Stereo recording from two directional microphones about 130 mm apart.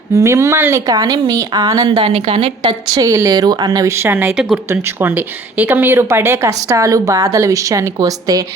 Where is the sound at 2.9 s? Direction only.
25° right (ahead or behind).